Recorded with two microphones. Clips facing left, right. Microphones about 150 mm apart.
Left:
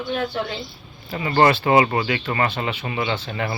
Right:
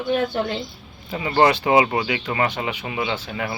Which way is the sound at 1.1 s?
10° right (ahead or behind).